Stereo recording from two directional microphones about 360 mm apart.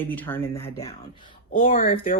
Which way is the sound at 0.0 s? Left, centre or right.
Centre.